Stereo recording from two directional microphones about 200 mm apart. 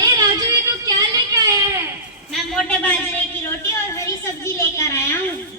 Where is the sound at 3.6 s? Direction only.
15° left (ahead or behind).